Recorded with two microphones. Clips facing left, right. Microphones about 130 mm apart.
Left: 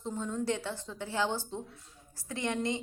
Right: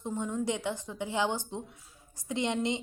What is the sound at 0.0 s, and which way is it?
A woman's voice, 15° right (ahead or behind).